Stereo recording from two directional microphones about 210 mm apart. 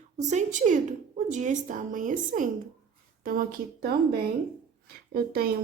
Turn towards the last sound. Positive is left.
turn(degrees=-45)  # may be behind; listen again after turning